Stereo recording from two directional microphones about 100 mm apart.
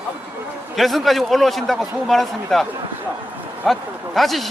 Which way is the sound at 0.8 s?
Centre (ahead or behind).